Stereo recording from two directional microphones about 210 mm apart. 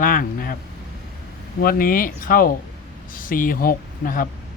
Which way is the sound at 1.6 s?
45° left (ahead or behind).